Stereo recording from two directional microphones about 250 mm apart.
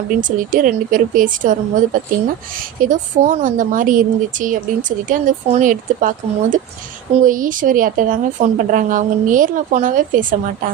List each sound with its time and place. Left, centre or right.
0.2 s a woman's voice: right